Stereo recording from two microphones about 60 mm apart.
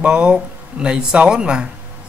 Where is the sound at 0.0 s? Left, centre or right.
Centre.